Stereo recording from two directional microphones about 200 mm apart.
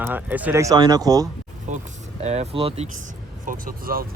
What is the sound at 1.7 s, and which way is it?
Speech, 35° right (ahead or behind).